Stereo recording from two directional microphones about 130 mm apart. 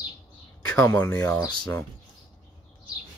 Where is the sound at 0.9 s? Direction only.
15° left (ahead or behind).